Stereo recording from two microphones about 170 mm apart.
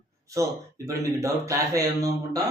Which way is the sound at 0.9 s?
20° right (ahead or behind).